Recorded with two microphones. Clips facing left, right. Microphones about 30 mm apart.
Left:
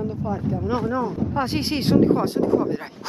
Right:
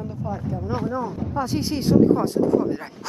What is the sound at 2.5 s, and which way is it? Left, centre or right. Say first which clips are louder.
Speech: even; centre.